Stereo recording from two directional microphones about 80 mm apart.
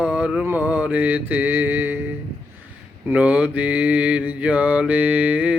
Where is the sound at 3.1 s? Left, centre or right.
Centre.